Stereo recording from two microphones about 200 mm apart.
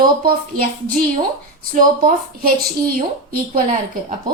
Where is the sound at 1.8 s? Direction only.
45° right (ahead or behind).